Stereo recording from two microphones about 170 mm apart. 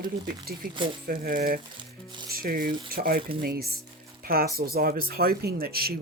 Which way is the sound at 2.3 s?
60° right (ahead or behind).